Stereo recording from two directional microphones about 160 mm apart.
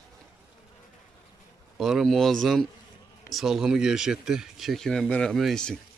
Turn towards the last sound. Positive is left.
turn(degrees=5)  # may be behind; listen again after turning